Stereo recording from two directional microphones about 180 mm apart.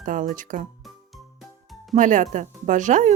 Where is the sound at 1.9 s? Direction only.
45° right (ahead or behind).